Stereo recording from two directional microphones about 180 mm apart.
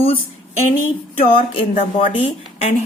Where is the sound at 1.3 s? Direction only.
30° left (ahead or behind).